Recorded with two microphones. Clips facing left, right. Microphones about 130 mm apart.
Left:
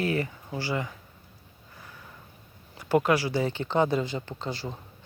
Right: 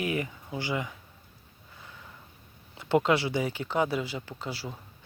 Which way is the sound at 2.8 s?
20° right (ahead or behind).